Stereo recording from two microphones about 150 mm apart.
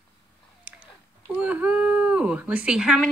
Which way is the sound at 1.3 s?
10° right (ahead or behind).